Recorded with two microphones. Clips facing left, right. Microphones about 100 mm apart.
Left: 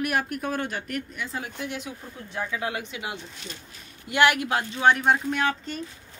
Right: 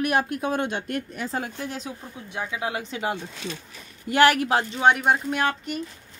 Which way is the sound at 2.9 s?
40° right (ahead or behind).